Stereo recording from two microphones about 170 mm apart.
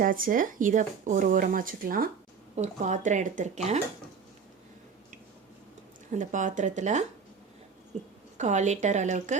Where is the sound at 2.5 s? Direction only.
45° right (ahead or behind).